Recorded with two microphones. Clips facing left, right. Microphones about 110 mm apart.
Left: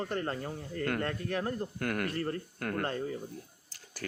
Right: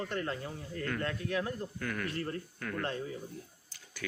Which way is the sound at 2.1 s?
40° left (ahead or behind).